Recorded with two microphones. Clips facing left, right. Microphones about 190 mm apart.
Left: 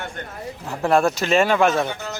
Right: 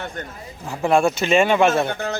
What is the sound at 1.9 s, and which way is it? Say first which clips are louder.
Speech: right 5 dB; 55° right (ahead or behind).